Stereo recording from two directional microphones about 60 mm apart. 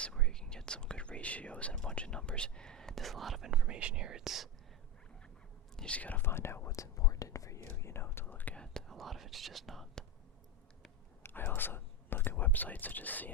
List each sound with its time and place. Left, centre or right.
0.0 s whispering: centre
1.7 s speech: centre
5.7 s speech: centre
6.2 s speech: left
6.7 s speech: left
7.8 s speech: left
8.5 s speech: centre
11.2 s speech: left